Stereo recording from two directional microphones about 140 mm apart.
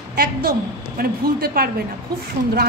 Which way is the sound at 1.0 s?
90° right.